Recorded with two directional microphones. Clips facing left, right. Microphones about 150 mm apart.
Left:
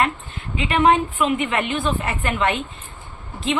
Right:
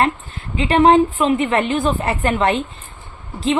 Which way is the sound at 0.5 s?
35° right (ahead or behind).